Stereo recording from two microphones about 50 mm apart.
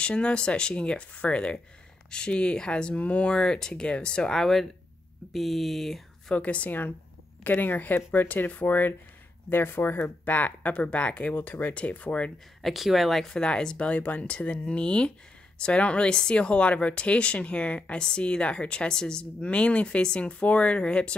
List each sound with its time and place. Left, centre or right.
0.0 s speech: left
5.3 s speech: centre
6.3 s speech: left
7.4 s speech: left
12.6 s speech: centre
13.3 s speech: centre